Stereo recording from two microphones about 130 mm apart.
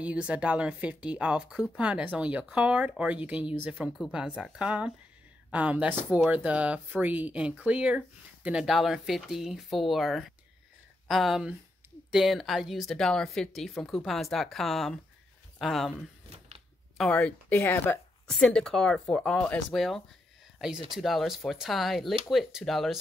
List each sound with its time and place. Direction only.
0.0 s a woman's voice: 10° right (ahead or behind)
16.3 s a sound: 50° right (ahead or behind)
17.1 s speech: 10° left (ahead or behind)
18.2 s speech: 5° left (ahead or behind)
20.5 s speech: 5° right (ahead or behind)